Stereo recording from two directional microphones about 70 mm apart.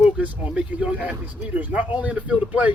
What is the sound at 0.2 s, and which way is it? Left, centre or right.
Speech, centre.